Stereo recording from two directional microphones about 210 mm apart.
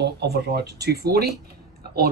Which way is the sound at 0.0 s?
50° right (ahead or behind).